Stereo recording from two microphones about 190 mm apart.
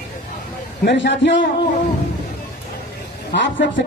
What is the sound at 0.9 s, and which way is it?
Speech, 75° left (ahead or behind).